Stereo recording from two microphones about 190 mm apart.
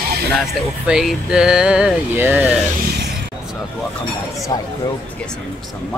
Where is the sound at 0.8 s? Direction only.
5° right (ahead or behind).